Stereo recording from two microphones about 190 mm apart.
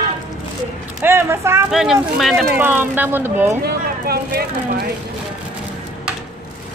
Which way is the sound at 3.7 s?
55° right (ahead or behind).